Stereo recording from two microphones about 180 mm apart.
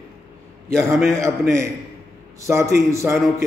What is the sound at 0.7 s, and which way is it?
Speech, 5° left (ahead or behind).